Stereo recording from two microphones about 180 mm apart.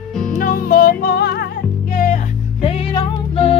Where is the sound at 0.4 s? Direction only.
50° left (ahead or behind).